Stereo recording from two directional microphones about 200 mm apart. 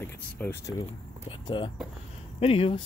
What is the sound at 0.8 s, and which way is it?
Speech, 25° left (ahead or behind).